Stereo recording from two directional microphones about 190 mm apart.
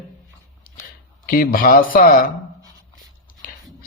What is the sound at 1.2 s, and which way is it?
Speech, 45° left (ahead or behind).